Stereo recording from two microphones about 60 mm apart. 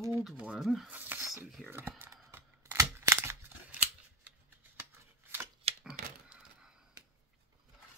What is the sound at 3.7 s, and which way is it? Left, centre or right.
Scissors, right.